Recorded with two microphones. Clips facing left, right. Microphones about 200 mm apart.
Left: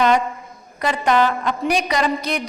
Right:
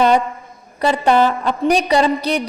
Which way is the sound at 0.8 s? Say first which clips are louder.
Right 4 dB; 30° right (ahead or behind).